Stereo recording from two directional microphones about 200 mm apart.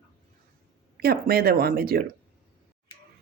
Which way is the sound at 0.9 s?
50° right (ahead or behind).